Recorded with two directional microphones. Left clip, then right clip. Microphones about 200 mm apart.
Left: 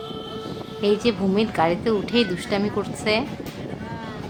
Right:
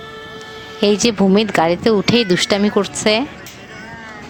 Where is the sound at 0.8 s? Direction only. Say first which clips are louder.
Right 6 dB; 50° right (ahead or behind).